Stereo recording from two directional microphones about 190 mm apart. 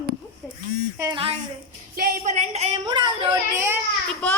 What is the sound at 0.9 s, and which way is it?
Speech, 15° right (ahead or behind).